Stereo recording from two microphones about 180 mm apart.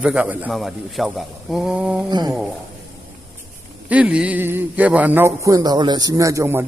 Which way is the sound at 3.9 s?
5° right (ahead or behind).